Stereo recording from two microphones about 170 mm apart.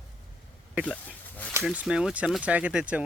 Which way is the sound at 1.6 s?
5° right (ahead or behind).